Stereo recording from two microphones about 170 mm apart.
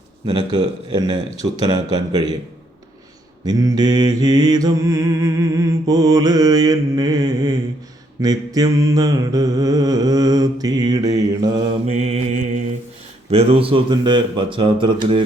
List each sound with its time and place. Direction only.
0.3 s mantra: 25° right (ahead or behind)
3.4 s mantra: 20° right (ahead or behind)
11.9 s mantra: 40° right (ahead or behind)
13.3 s speech: 35° right (ahead or behind)